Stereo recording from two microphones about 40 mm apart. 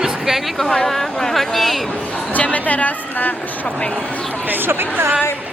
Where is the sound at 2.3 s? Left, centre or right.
Left.